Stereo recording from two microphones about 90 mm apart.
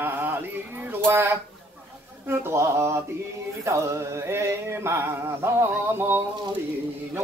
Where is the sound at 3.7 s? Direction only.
30° right (ahead or behind).